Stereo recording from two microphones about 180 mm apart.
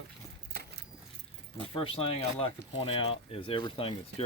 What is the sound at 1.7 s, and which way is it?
Speech, 30° left (ahead or behind).